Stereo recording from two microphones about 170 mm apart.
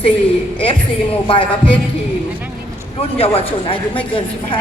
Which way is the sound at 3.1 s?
35° left (ahead or behind).